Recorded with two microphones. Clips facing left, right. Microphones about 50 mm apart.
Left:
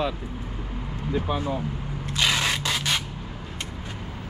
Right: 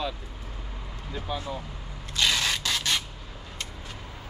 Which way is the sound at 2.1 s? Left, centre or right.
Centre.